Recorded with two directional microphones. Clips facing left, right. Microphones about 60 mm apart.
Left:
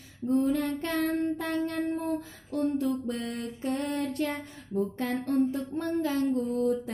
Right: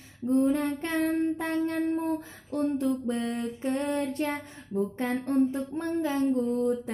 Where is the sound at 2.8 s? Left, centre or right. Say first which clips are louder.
Right 2 dB; right.